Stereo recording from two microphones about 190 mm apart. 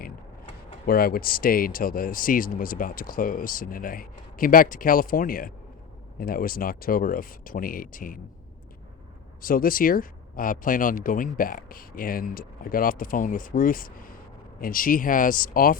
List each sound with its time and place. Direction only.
0.9 s speech: 50° left (ahead or behind)
9.4 s speech: 50° left (ahead or behind)